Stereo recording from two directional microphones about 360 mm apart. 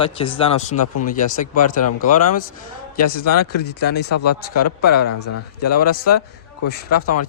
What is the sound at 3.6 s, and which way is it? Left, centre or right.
Speech, left.